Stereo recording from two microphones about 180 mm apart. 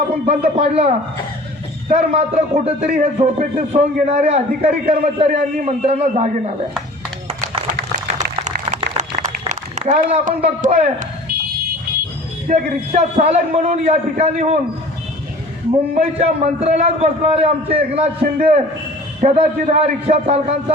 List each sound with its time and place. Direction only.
0.3 s a man's voice: 35° right (ahead or behind)
9.5 s a man's voice: 40° right (ahead or behind)
12.5 s a man's voice: 40° right (ahead or behind)
16.0 s a man's voice: 35° right (ahead or behind)
18.2 s a man's voice: 50° right (ahead or behind)